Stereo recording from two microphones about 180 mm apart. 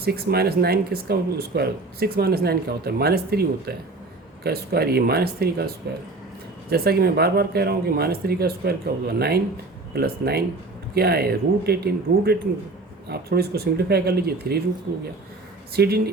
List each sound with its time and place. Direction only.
0.0 s speech: 60° right (ahead or behind)
15.7 s speech: 60° right (ahead or behind)